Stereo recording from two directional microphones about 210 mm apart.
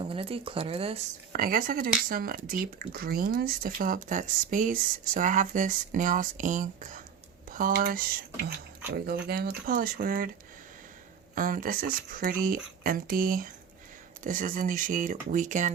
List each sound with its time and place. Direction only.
0.0 s speech: 25° right (ahead or behind)
1.3 s speech: 40° right (ahead or behind)
11.3 s speech: 40° right (ahead or behind)